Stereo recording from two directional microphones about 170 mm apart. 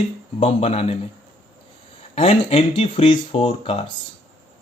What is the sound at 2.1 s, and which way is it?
Speech, 35° left (ahead or behind).